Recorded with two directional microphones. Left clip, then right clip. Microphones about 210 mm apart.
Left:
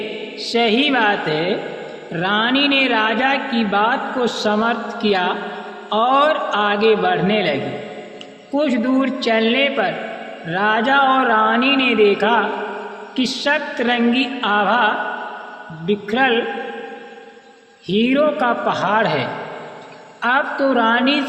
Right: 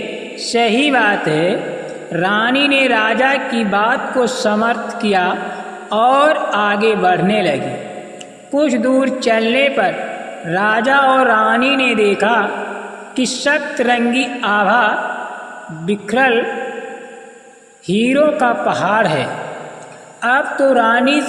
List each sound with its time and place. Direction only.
0.4 s a man's voice: 40° right (ahead or behind)
17.8 s a man's voice: 40° right (ahead or behind)